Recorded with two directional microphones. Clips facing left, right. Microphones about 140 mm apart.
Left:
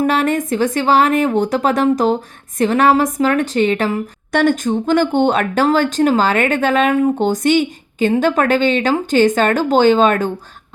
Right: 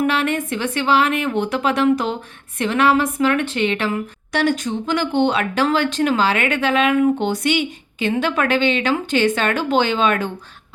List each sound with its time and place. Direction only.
0.0 s a woman's voice: 40° left (ahead or behind)